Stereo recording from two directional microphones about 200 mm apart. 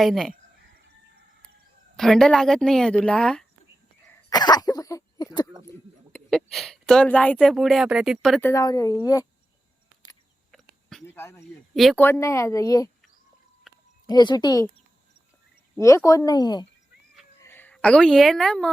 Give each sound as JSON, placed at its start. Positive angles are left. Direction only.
{"t": 0.0, "sound": "speech", "side_deg": 0}
{"t": 2.0, "sound": "speech", "side_deg": 0}
{"t": 4.3, "sound": "throat clearing", "side_deg": 20}
{"t": 6.1, "sound": "speech", "side_deg": 0}
{"t": 8.4, "sound": "a woman's voice", "side_deg": 15}
{"t": 10.5, "sound": "a sound", "side_deg": 5}
{"t": 11.0, "sound": "speech", "side_deg": 10}
{"t": 11.7, "sound": "speech", "side_deg": 0}
{"t": 12.0, "sound": "a woman's voice", "side_deg": 15}
{"t": 14.1, "sound": "speech", "side_deg": 20}
{"t": 15.8, "sound": "a woman's voice", "side_deg": 15}